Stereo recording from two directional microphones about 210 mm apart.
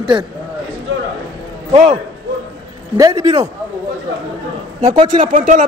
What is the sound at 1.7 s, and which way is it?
Speech, 30° right (ahead or behind).